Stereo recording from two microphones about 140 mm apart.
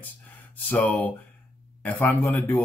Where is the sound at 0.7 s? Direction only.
10° left (ahead or behind).